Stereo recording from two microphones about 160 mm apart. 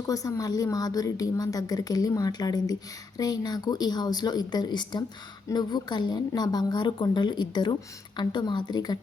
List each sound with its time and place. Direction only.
0.1 s a woman's voice: 20° left (ahead or behind)